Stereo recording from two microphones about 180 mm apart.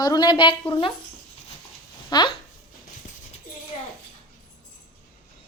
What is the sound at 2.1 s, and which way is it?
Speech, 20° left (ahead or behind).